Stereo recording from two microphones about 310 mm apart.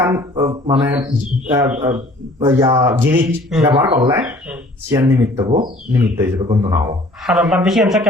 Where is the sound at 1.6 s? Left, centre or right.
Centre.